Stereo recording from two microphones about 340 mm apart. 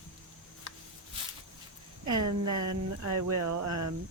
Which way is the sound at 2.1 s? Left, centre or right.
Right.